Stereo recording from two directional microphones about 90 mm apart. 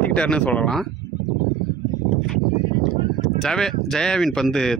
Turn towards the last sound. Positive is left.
turn(degrees=5)  # may be behind; listen again after turning